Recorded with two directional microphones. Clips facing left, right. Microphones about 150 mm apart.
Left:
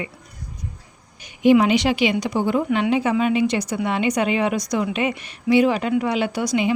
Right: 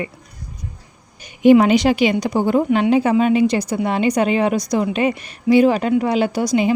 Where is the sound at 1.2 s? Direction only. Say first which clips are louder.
Right 4 dB; 50° right (ahead or behind).